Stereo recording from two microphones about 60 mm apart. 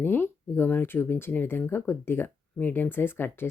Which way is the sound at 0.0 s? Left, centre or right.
Left.